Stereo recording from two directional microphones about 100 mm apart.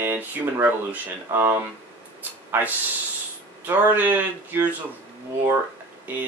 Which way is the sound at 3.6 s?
15° right (ahead or behind).